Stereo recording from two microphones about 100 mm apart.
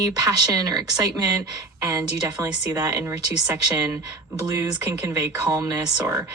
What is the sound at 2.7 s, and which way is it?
Speech, 30° right (ahead or behind).